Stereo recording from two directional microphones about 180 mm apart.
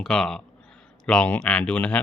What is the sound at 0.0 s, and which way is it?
Speech, centre (ahead or behind).